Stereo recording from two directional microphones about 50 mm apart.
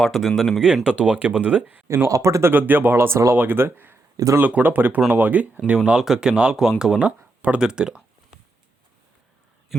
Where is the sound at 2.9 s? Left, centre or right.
Right.